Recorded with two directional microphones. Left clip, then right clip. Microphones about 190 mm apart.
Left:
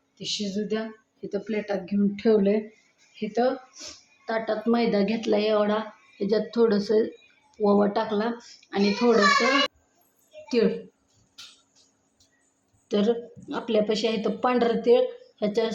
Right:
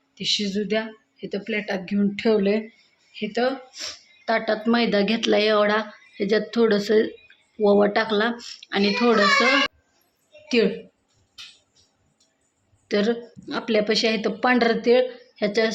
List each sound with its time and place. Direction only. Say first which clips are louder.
0.2 s speech: right 6 dB; 5° right (ahead or behind)
7.6 s speech: right 4 dB; 25° right (ahead or behind)
7.9 s speech: right 5 dB; 5° right (ahead or behind)
12.9 s speech: right 2 dB; 10° right (ahead or behind)